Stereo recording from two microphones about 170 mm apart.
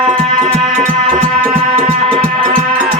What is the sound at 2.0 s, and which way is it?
Music, 35° right (ahead or behind).